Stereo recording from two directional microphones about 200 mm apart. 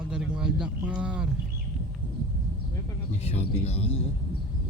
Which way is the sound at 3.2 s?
30° left (ahead or behind).